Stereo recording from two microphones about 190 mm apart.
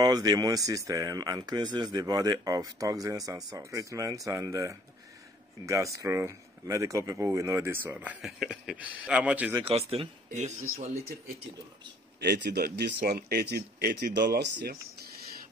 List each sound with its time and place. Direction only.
0.0 s speech: 20° right (ahead or behind)
9.6 s speech: 30° right (ahead or behind)
12.2 s speech: 60° right (ahead or behind)